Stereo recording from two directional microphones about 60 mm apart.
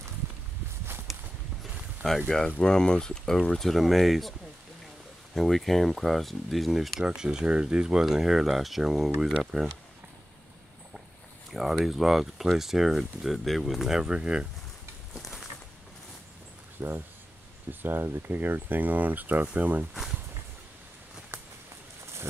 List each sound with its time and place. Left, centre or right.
2.0 s speech: centre
7.1 s speech: centre
11.5 s speech: centre
15.1 s a sound: centre
16.8 s speech: right
17.6 s speech: right
19.9 s speech: centre
21.3 s a sound: right